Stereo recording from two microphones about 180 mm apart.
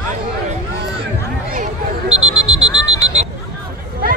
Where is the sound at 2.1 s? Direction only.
5° right (ahead or behind).